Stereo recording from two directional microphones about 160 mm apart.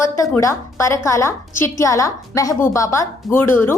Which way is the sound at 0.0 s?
20° left (ahead or behind).